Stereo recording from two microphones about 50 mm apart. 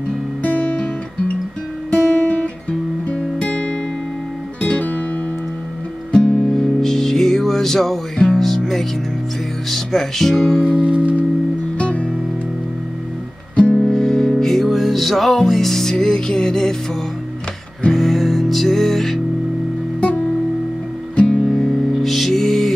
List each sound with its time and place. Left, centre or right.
0.4 s music: left
1.9 s guitar: left
4.6 s music: left
6.1 s music: left
6.4 s music: centre
10.6 s music: right
11.8 s music: left
13.6 s music: left
13.9 s music: centre
17.9 s music: centre
21.5 s music: centre